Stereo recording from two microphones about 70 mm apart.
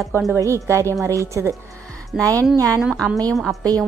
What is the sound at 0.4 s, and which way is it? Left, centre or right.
A woman's voice, right.